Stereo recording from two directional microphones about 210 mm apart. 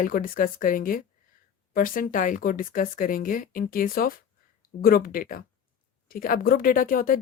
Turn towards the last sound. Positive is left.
turn(degrees=40)  # may be behind; listen again after turning